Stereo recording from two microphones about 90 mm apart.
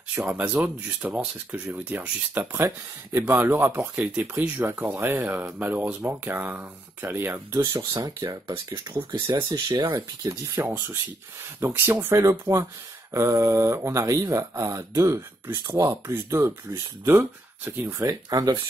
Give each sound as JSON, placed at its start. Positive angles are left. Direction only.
{"t": 0.1, "sound": "speech", "side_deg": -20}
{"t": 3.8, "sound": "speech", "side_deg": -10}
{"t": 7.6, "sound": "speech", "side_deg": -65}
{"t": 8.2, "sound": "speech", "side_deg": -50}
{"t": 10.5, "sound": "speech", "side_deg": -25}
{"t": 18.0, "sound": "speech", "side_deg": -45}